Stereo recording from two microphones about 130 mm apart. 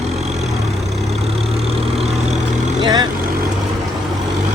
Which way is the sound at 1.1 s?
55° right (ahead or behind).